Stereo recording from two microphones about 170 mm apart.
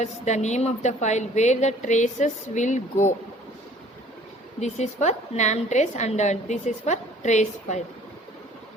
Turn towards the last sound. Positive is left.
turn(degrees=45)  # may be behind; listen again after turning